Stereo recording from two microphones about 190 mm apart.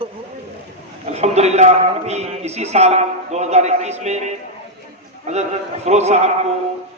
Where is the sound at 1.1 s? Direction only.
35° right (ahead or behind).